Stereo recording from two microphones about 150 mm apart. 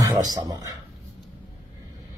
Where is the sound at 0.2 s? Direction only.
25° right (ahead or behind).